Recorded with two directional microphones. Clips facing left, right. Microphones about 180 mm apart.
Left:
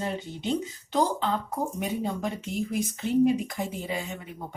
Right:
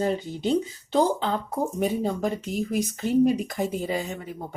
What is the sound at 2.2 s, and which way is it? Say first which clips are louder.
Speech: right 4 dB; 40° right (ahead or behind).